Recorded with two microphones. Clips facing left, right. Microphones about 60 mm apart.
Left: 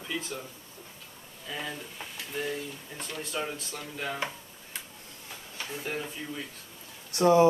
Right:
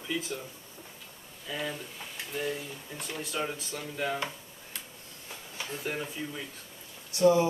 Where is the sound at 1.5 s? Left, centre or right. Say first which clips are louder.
Right 1 dB; centre.